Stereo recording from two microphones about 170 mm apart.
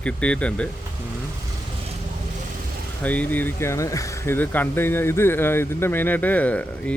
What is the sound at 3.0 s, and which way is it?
Speech, 10° left (ahead or behind).